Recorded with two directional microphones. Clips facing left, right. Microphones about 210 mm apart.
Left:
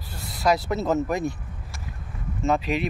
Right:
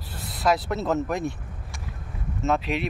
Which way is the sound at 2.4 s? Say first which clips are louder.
Left 1 dB; centre (ahead or behind).